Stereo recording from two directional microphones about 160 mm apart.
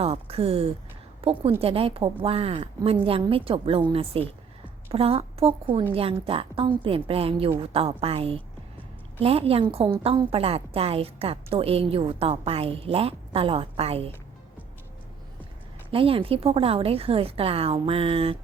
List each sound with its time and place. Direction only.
0.0 s a woman's voice: 40° right (ahead or behind)
15.9 s a woman's voice: 35° right (ahead or behind)